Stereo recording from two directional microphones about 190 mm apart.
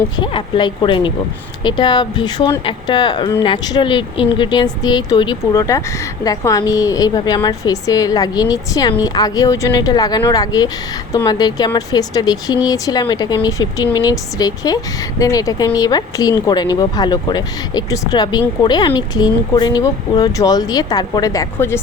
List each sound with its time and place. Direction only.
0.2 s speech: 25° left (ahead or behind)